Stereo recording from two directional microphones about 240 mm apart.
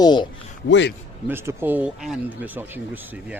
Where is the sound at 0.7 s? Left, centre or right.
Left.